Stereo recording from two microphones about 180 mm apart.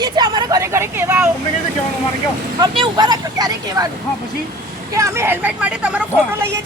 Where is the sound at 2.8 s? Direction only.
25° right (ahead or behind).